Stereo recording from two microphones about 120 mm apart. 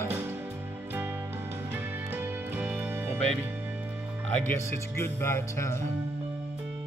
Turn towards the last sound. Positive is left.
turn(degrees=20)  # may be behind; listen again after turning